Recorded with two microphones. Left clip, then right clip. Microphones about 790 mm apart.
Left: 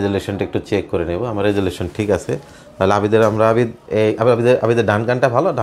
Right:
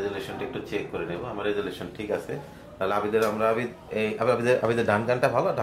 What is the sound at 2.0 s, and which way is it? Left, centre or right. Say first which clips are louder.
Speech: left 12 dB; left.